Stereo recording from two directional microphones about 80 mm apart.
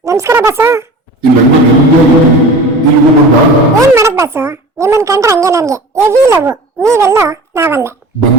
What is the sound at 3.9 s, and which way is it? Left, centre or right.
Speech, right.